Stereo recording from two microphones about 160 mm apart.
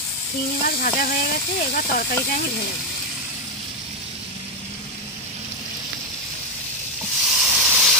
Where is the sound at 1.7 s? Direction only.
65° left (ahead or behind).